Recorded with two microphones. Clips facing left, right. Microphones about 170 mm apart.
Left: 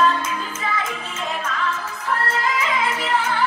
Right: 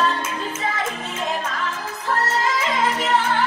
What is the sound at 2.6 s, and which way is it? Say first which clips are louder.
Music: right 1 dB; 40° right (ahead or behind).